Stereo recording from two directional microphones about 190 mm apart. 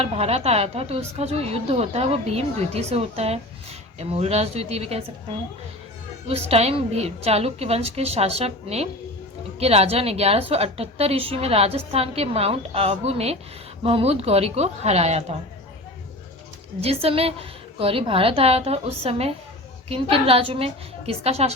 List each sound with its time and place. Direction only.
0.0 s a woman's voice: 35° right (ahead or behind)
6.2 s a woman's voice: 35° right (ahead or behind)
16.8 s a woman's voice: 30° right (ahead or behind)